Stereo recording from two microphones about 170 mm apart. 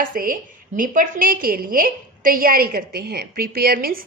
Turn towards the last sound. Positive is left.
turn(degrees=-60)  # may be behind; listen again after turning